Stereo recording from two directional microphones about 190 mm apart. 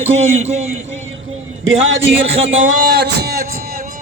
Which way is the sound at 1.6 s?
90° right.